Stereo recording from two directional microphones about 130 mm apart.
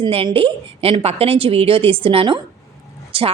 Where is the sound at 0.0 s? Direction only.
40° right (ahead or behind).